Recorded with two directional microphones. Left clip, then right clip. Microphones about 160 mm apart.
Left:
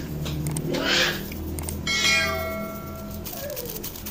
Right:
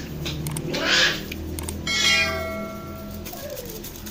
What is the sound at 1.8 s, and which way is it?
Church bell, centre (ahead or behind).